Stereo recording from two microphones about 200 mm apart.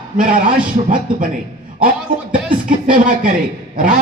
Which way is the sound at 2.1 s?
45° right (ahead or behind).